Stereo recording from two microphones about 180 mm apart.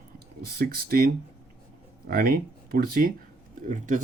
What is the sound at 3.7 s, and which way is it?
Speech, 45° right (ahead or behind).